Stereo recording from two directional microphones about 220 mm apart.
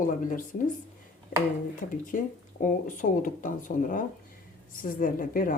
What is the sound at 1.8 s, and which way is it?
A woman's voice, 35° left (ahead or behind).